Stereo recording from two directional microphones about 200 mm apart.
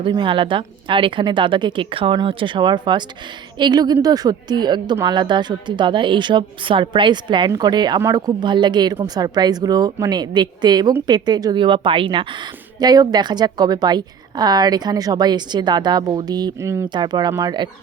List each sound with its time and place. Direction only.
0.0 s speech: 25° right (ahead or behind)